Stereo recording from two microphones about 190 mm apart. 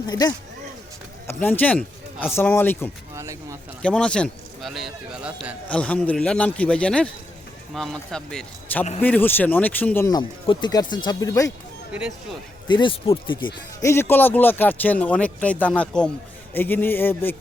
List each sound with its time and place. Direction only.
0.1 s speech: 20° left (ahead or behind)
1.3 s speech: 10° left (ahead or behind)
3.2 s a sound: 15° right (ahead or behind)
3.8 s a man's voice: 5° left (ahead or behind)
5.6 s a man's voice: 5° left (ahead or behind)
11.9 s a man's voice: 5° right (ahead or behind)
12.6 s speech: 25° left (ahead or behind)
13.9 s speech: 10° left (ahead or behind)